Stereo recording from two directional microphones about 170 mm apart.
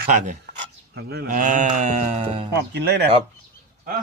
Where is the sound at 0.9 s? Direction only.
70° right (ahead or behind).